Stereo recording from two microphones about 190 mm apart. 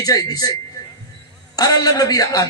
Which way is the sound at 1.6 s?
20° left (ahead or behind).